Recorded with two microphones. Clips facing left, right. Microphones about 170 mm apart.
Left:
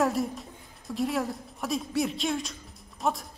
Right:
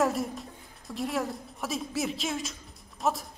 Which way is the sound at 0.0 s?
Centre (ahead or behind).